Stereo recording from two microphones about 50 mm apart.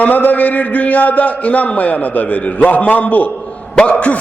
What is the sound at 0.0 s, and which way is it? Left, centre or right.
A man's voice, left.